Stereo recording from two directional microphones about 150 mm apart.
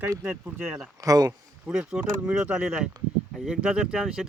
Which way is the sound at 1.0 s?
25° right (ahead or behind).